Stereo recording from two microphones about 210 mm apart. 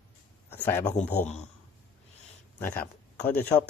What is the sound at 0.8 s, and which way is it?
Speech, 35° left (ahead or behind).